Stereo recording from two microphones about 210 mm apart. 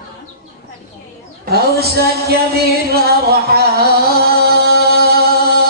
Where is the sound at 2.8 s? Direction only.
50° right (ahead or behind).